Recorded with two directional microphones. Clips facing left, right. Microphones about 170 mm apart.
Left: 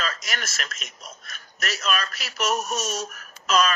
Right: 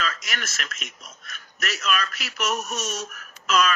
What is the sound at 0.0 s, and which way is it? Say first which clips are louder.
A man's voice: even; 35° left (ahead or behind).